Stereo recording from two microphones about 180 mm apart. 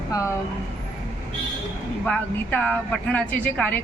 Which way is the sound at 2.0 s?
5° left (ahead or behind).